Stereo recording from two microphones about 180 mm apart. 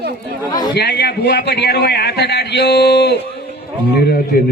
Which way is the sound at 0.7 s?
70° left (ahead or behind).